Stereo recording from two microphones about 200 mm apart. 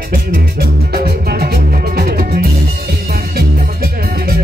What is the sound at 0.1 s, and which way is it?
Music, 50° right (ahead or behind).